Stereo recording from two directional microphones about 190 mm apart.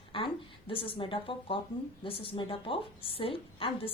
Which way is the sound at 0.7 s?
30° left (ahead or behind).